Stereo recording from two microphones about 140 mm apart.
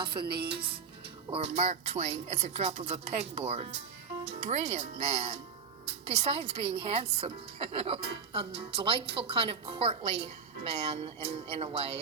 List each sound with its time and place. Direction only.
0.0 s speech: 35° right (ahead or behind)
1.3 s a woman's voice: 50° right (ahead or behind)